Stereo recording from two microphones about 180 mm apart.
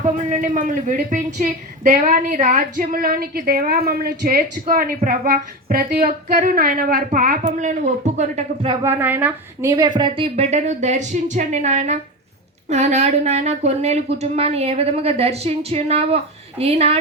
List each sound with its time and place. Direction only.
0.0 s a woman's voice: 45° right (ahead or behind)
8.8 s a woman's voice: 10° right (ahead or behind)
10.0 s speech: 30° right (ahead or behind)